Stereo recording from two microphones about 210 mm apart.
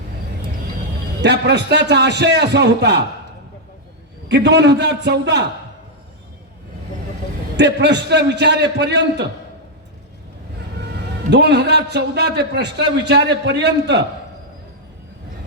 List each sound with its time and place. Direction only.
1.2 s a man's voice: 55° right (ahead or behind)
4.3 s a man's voice: 55° right (ahead or behind)
7.5 s a man's voice: 55° right (ahead or behind)
11.3 s a man's voice: 55° right (ahead or behind)